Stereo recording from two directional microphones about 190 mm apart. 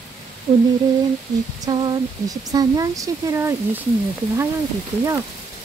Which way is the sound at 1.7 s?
20° right (ahead or behind).